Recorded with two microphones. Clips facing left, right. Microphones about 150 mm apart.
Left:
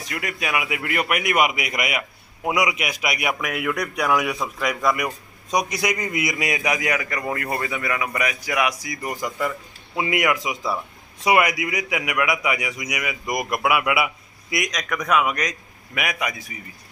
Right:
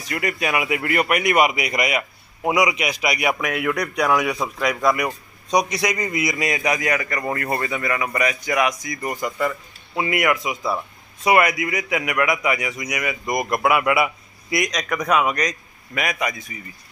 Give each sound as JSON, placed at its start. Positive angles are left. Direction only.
{"t": 0.0, "sound": "a man's voice", "side_deg": 0}